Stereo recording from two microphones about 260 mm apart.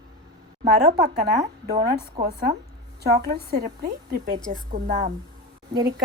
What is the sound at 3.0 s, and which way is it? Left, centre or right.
A woman's voice, right.